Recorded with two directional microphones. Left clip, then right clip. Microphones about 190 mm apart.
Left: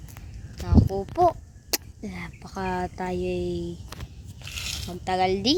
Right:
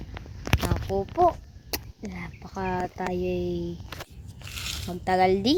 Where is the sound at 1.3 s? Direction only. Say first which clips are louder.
Left 1 dB; 15° left (ahead or behind).